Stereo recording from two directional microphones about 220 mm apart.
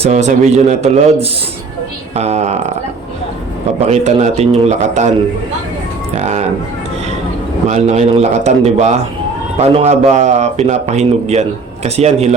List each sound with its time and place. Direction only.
0.0 s a man's voice: 35° right (ahead or behind)
3.8 s a man's voice: 30° right (ahead or behind)
7.7 s a man's voice: 30° right (ahead or behind)